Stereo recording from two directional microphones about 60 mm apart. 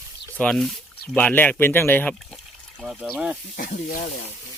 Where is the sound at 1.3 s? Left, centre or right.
Left.